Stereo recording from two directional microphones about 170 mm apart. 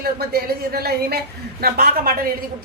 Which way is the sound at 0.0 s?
65° right (ahead or behind).